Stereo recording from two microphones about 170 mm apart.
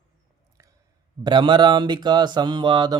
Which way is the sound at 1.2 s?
25° right (ahead or behind).